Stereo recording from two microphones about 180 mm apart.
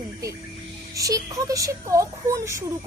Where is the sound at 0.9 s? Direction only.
20° right (ahead or behind).